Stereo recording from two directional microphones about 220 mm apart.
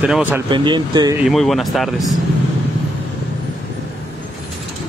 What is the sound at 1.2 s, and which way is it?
Speech, centre (ahead or behind).